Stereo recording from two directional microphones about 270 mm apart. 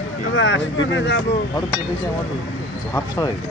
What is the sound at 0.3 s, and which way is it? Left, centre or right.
Speech, left.